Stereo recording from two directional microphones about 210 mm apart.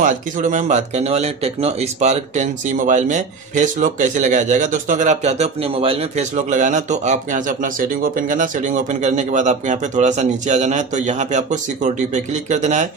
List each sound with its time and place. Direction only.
0.0 s speech: 35° right (ahead or behind)